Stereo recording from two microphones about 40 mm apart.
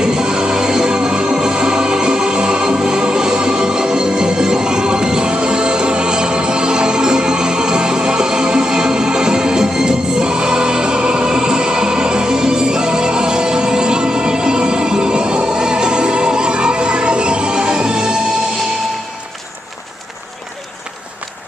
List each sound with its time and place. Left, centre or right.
0.0 s music: centre